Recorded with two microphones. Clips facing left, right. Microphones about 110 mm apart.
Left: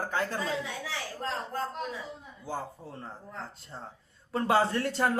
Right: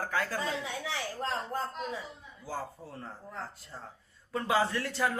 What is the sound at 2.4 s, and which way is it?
Speech, 20° left (ahead or behind).